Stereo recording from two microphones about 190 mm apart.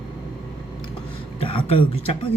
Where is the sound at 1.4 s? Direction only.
30° left (ahead or behind).